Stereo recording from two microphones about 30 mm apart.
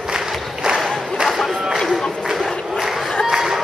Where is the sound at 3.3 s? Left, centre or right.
Centre.